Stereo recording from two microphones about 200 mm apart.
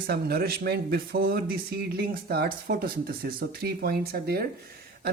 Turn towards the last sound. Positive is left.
turn(degrees=-50)  # may be behind; listen again after turning